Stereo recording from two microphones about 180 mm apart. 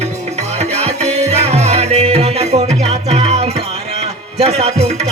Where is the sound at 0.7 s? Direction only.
35° right (ahead or behind).